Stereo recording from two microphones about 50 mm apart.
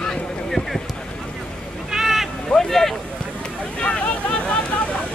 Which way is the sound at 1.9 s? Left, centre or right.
Centre.